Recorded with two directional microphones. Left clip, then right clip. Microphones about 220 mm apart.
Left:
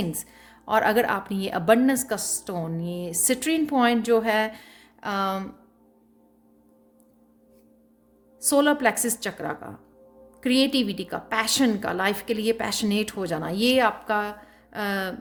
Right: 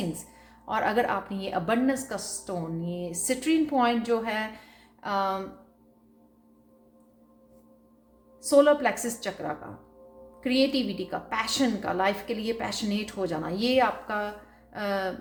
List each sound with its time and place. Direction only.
0.1 s speech: 50° left (ahead or behind)
8.4 s speech: 50° left (ahead or behind)